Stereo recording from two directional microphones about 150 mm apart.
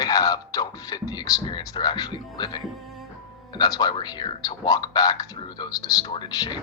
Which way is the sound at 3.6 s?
25° left (ahead or behind).